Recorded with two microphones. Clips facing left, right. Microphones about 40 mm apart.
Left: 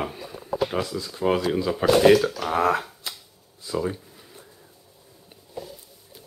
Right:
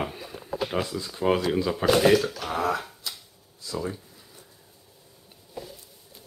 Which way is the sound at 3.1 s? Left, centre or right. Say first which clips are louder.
Left 1 dB; left.